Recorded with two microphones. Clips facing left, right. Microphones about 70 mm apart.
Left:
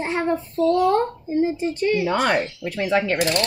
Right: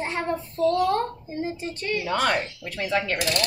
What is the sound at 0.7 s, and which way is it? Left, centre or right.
Speech, left.